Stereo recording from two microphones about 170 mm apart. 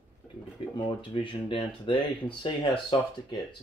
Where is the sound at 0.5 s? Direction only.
30° left (ahead or behind).